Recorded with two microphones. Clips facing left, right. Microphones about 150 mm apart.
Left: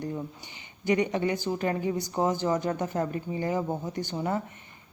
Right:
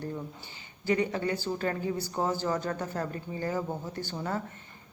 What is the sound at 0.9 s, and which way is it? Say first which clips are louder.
A woman's voice: left 3 dB; 20° left (ahead or behind).